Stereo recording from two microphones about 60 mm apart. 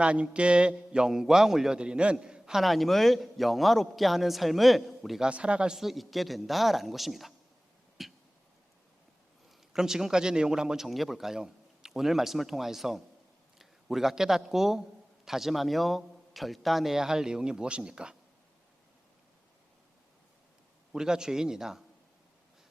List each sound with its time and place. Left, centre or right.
0.0 s a man's voice: centre
1.8 s a man's voice: centre
2.6 s a man's voice: centre
5.2 s a man's voice: centre
5.8 s a man's voice: centre
8.0 s a sound: centre
9.5 s a man's voice: centre
20.9 s a man's voice: centre